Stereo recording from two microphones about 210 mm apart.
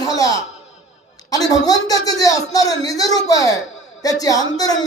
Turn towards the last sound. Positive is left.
turn(degrees=15)  # may be behind; listen again after turning